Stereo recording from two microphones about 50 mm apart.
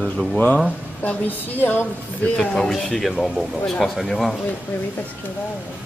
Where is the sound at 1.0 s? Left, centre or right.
Left.